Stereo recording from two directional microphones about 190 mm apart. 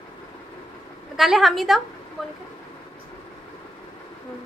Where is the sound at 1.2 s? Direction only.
Centre (ahead or behind).